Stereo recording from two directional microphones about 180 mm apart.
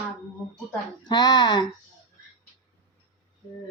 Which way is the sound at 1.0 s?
20° left (ahead or behind).